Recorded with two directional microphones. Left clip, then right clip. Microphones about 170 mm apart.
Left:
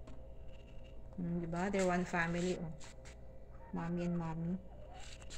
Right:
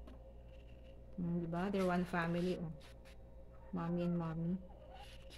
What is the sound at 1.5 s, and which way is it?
Speech, centre (ahead or behind).